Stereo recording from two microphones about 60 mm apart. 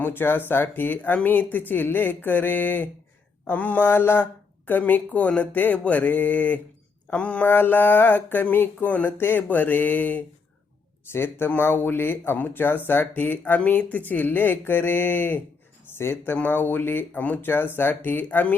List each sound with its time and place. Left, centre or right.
0.0 s a woman's voice: left; by 7.4 s centre
7.4 s speech: left
11.1 s speech: left
16.3 s a woman's voice: left